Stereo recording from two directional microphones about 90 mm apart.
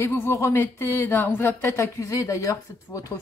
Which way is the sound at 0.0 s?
30° left (ahead or behind).